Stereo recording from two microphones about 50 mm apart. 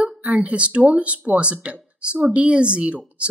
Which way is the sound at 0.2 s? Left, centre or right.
Right.